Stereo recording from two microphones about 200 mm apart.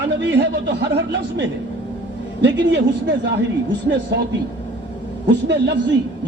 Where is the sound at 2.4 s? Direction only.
65° right (ahead or behind).